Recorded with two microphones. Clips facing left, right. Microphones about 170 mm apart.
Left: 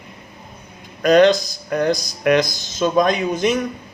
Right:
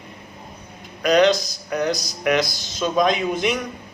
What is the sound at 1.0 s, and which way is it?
A man's voice, 50° left (ahead or behind).